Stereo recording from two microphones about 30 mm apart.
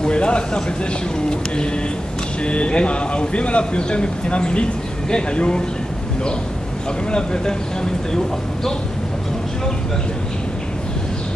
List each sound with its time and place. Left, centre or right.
0.0 s speech: left
2.4 s a man's voice: left
7.1 s speech: left